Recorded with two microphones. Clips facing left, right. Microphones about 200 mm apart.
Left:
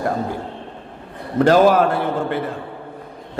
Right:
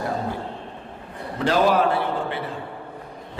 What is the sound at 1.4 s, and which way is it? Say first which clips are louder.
A man's voice: left 6 dB; 45° left (ahead or behind).